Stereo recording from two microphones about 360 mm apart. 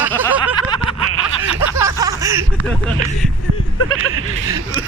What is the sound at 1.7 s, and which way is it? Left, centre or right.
Speech, centre.